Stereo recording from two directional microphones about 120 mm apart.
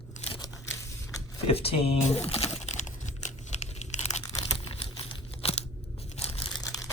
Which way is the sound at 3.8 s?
75° left (ahead or behind).